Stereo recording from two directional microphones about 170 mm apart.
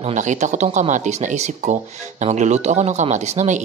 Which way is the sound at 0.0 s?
45° right (ahead or behind).